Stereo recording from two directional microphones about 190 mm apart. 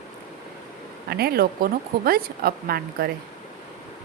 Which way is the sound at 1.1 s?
55° right (ahead or behind).